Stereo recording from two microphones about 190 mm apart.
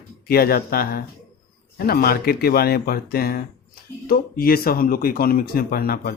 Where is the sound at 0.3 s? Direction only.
50° left (ahead or behind).